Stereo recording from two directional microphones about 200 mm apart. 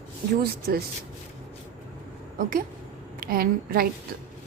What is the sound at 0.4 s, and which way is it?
Speech, 50° right (ahead or behind).